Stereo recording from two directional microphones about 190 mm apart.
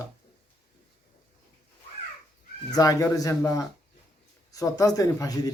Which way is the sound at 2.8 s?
20° left (ahead or behind).